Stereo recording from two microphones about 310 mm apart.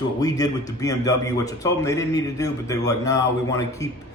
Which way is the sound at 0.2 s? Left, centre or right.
Centre.